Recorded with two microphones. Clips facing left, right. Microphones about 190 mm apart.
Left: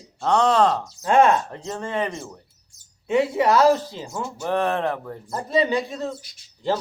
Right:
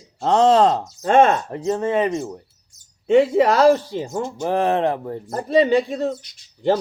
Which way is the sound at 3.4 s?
85° right.